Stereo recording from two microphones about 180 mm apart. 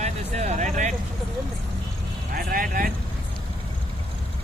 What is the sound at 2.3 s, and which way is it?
Vehicle, 55° right (ahead or behind).